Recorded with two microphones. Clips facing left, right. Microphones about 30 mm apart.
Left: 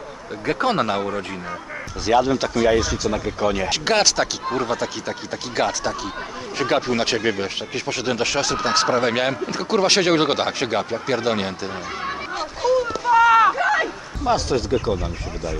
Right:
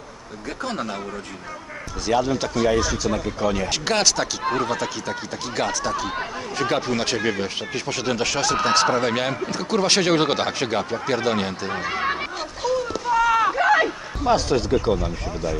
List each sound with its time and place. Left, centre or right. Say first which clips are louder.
0.5 s speech: left 8 dB; left
2.0 s speech: left 3 dB; centre
11.7 s speech: right 4 dB; centre
12.4 s a sound: left 4 dB; centre
13.6 s speech: right 2 dB; centre